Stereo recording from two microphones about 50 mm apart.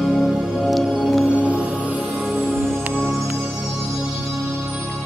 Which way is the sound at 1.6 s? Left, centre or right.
Right.